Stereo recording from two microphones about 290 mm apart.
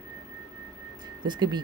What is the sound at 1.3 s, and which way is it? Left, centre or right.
Speech, centre.